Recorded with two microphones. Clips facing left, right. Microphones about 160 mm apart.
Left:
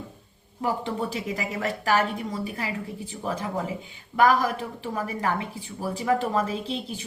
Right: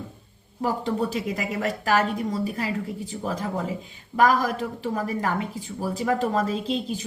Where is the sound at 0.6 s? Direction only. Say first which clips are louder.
Right 2 dB; 40° right (ahead or behind).